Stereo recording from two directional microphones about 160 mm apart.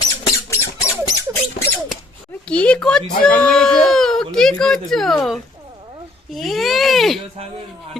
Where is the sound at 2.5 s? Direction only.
5° left (ahead or behind).